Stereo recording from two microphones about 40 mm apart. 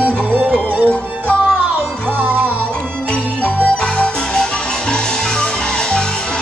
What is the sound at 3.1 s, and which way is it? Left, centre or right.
Music, left.